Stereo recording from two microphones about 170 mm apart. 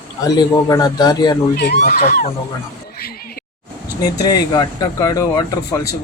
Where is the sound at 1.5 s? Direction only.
70° left (ahead or behind).